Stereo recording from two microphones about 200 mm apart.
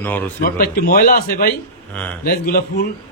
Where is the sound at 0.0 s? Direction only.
10° left (ahead or behind).